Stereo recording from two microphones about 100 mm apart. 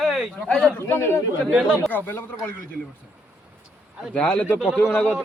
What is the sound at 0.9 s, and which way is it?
Speech, 25° left (ahead or behind).